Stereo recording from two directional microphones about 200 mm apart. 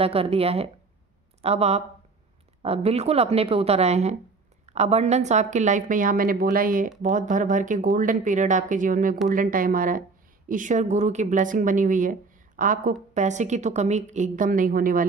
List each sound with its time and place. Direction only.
0.0 s speech: 30° right (ahead or behind); by 15.0 s 45° right (ahead or behind)